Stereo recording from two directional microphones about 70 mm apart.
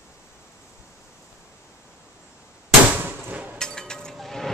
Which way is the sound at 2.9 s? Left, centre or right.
Right.